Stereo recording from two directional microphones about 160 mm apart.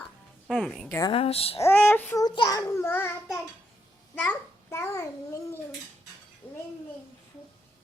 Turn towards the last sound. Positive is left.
turn(degrees=10)  # may be behind; listen again after turning